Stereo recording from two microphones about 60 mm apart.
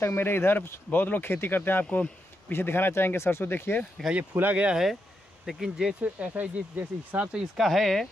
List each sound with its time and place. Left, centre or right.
0.0 s speech: left
2.5 s speech: left
4.1 s speech: right
5.5 s speech: centre
6.1 s speech: right
7.5 s speech: centre